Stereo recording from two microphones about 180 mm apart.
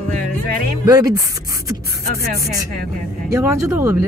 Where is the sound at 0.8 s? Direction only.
20° right (ahead or behind).